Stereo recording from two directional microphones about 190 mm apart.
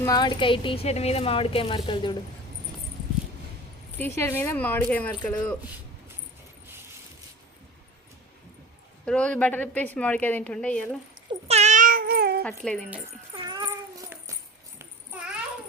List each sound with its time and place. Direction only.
0.0 s speech: 20° left (ahead or behind)
3.9 s a woman's voice: 10° left (ahead or behind)
9.0 s a woman's voice: 5° left (ahead or behind)
11.4 s cat: 35° right (ahead or behind); by 12.4 s 55° right (ahead or behind)
12.4 s speech: 5° left (ahead or behind)
13.4 s a sound: 25° right (ahead or behind)
14.1 s music: 10° right (ahead or behind)
14.8 s a sound: 10° right (ahead or behind)